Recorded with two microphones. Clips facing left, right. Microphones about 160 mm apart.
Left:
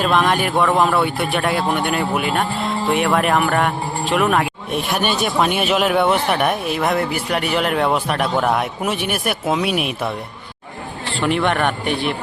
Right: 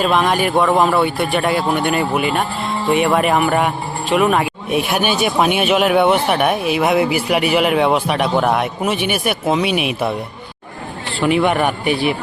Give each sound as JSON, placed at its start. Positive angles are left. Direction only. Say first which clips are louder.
{"t": 0.0, "sound": "speech", "louder": "right 2 dB", "side_deg": 0}
{"t": 11.2, "sound": "speech", "louder": "right 3 dB", "side_deg": -5}